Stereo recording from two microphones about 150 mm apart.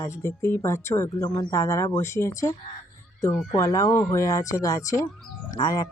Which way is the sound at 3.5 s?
20° left (ahead or behind).